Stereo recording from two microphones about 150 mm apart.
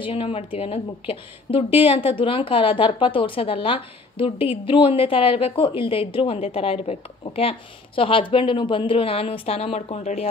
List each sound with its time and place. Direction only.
0.0 s a woman's voice: 35° left (ahead or behind)